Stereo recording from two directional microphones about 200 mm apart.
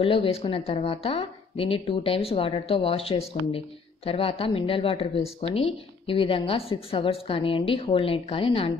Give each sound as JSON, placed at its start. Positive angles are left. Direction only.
{"t": 0.0, "sound": "a woman's voice", "side_deg": 25}